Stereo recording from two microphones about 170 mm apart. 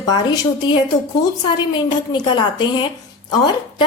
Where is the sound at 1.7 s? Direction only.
25° left (ahead or behind).